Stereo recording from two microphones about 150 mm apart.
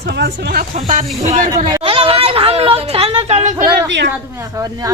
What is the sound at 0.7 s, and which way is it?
Speech, 50° right (ahead or behind).